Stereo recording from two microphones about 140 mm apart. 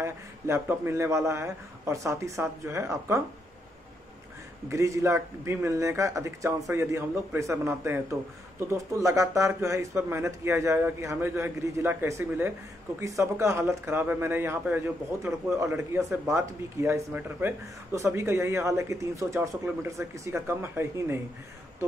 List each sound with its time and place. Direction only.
0.0 s speech: 20° right (ahead or behind)
4.6 s speech: 20° right (ahead or behind)